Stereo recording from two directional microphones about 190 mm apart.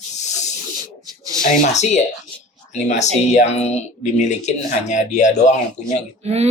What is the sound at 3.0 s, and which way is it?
Speech, 35° left (ahead or behind).